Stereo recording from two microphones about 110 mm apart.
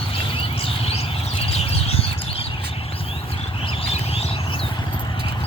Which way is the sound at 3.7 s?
65° left (ahead or behind).